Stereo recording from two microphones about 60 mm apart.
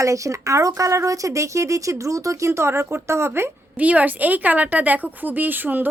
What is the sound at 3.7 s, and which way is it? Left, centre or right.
Speech, right.